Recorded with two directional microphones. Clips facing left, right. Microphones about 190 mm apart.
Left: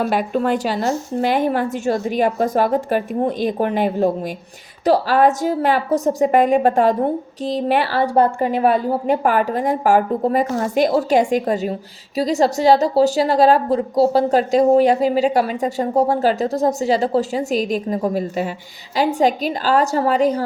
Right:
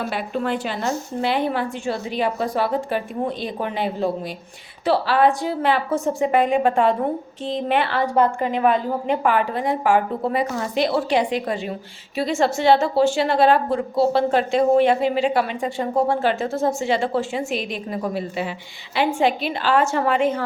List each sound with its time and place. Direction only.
0.0 s a woman's voice: 45° left (ahead or behind)